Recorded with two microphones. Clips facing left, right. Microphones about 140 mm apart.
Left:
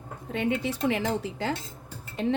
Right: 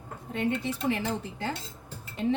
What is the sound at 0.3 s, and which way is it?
A woman's voice, 90° left.